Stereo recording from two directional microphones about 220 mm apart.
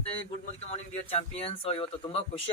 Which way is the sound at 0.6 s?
30° left (ahead or behind).